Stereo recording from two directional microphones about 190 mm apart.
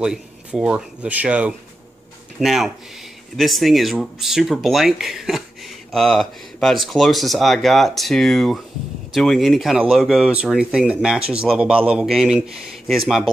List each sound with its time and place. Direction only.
0.0 s speech: 5° right (ahead or behind)